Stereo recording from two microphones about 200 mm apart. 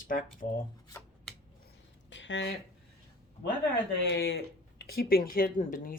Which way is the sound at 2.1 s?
65° left (ahead or behind).